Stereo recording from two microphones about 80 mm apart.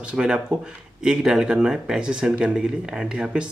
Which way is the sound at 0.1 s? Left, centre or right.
Centre.